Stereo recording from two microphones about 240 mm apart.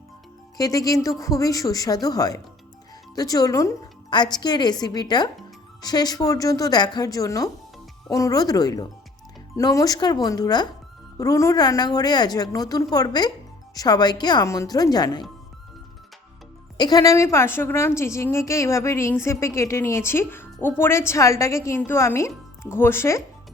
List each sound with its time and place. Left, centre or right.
0.5 s a woman's voice: centre
16.7 s a woman's voice: centre